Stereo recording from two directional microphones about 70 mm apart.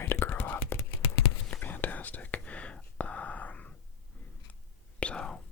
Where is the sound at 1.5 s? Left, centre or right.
Left.